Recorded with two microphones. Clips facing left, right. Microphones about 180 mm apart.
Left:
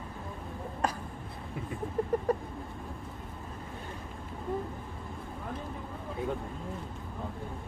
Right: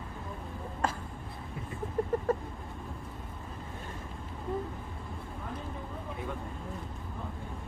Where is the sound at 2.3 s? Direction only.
15° left (ahead or behind).